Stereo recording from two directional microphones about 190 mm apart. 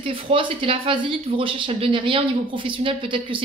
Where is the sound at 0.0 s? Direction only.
30° right (ahead or behind).